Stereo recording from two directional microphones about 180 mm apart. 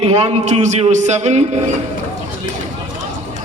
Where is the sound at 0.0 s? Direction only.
35° right (ahead or behind).